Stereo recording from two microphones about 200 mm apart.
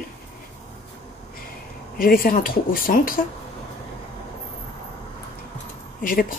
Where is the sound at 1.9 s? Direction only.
45° left (ahead or behind).